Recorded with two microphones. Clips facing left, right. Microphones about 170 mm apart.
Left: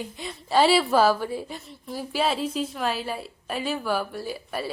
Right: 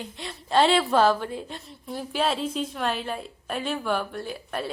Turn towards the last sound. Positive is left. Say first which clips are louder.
# left 1 dB
turn(degrees=5)  # may be behind; listen again after turning